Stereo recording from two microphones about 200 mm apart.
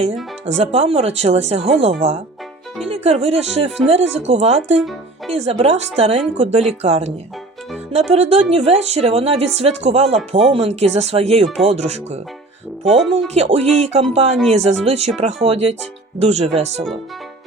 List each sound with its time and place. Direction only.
0.4 s speech: 35° right (ahead or behind)
8.1 s speech: 30° right (ahead or behind)
11.4 s speech: centre (ahead or behind)
11.7 s speech: 35° right (ahead or behind)
12.8 s speech: centre (ahead or behind)
13.3 s speech: 35° right (ahead or behind)